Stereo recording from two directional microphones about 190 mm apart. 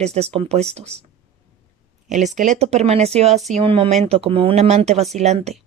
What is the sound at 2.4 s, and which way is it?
Speech, 35° right (ahead or behind).